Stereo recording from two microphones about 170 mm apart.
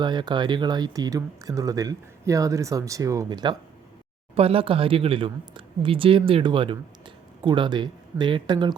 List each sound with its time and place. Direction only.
0.0 s speech: 25° right (ahead or behind)